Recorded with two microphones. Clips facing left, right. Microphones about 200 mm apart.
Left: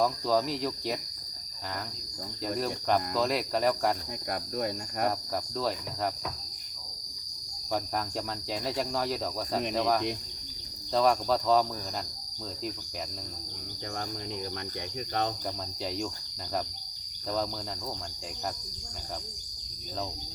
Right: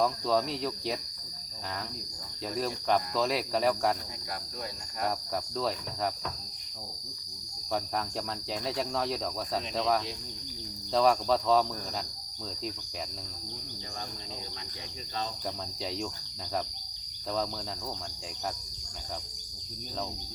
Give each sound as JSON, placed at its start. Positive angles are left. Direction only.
{"t": 0.0, "sound": "speech", "side_deg": 0}
{"t": 2.6, "sound": "speech", "side_deg": 0}
{"t": 4.3, "sound": "cricket", "side_deg": 55}
{"t": 5.5, "sound": "speech", "side_deg": 0}
{"t": 8.6, "sound": "speech", "side_deg": 0}